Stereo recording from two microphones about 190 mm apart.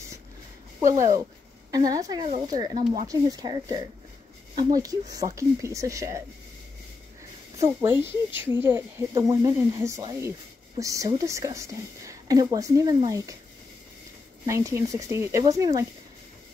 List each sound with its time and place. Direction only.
0.7 s speech: 15° right (ahead or behind)
2.8 s speech: 40° right (ahead or behind)
3.1 s speech: 20° right (ahead or behind)
7.5 s speech: 15° right (ahead or behind)
14.4 s speech: 15° right (ahead or behind)